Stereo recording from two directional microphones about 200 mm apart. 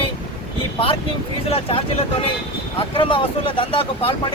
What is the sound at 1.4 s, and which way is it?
Speech, 30° left (ahead or behind).